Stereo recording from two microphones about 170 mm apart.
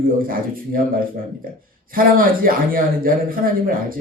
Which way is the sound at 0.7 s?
55° right (ahead or behind).